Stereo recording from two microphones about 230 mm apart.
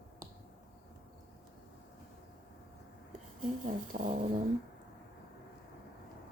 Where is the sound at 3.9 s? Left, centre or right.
Right.